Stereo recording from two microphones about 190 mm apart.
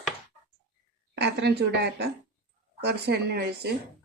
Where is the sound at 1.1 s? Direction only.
60° right (ahead or behind).